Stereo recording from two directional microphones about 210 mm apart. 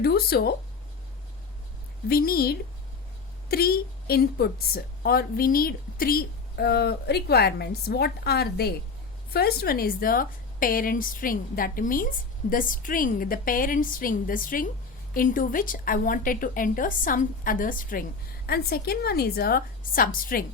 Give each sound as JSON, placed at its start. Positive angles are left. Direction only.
{"t": 0.0, "sound": "a woman's voice", "side_deg": 50}
{"t": 2.0, "sound": "a woman's voice", "side_deg": 45}